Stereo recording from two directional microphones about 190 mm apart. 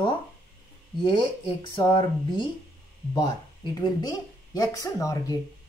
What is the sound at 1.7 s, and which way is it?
Speech, 25° left (ahead or behind).